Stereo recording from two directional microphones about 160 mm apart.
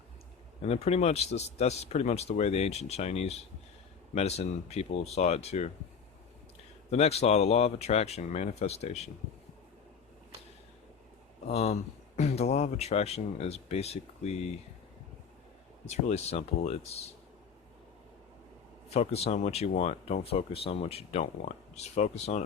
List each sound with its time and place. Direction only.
0.6 s speech: 40° left (ahead or behind)
6.9 s speech: 40° left (ahead or behind)
11.4 s speech: 40° left (ahead or behind)
15.9 s speech: 45° left (ahead or behind)
18.9 s speech: 40° left (ahead or behind)